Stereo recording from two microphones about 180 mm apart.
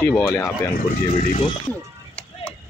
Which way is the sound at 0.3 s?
15° left (ahead or behind).